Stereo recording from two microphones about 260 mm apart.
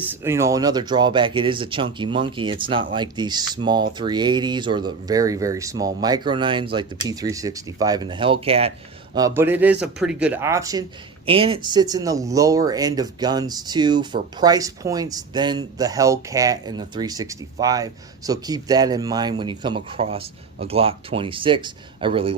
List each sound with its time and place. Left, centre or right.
0.0 s speech: centre
9.1 s speech: centre